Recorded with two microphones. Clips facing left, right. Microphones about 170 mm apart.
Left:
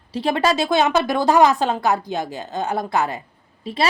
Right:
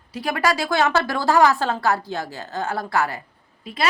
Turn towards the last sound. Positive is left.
turn(degrees=30)  # may be behind; listen again after turning